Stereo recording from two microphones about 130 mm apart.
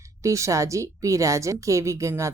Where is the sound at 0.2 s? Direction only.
25° right (ahead or behind).